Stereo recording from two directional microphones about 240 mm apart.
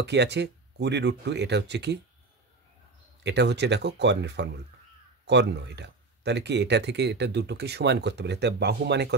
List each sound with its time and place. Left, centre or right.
0.0 s speech: right
3.3 s speech: right